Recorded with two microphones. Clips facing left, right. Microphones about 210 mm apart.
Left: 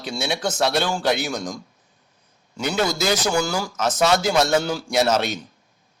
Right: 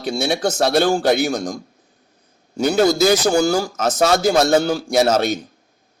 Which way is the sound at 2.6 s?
40° right (ahead or behind).